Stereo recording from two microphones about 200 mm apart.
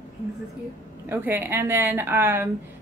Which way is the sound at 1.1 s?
10° right (ahead or behind).